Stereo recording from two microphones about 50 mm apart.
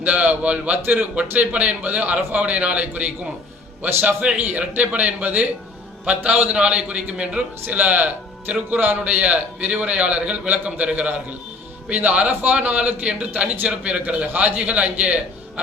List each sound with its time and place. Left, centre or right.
0.0 s a man's voice: right
4.0 s a man's voice: right
9.0 s a man's voice: right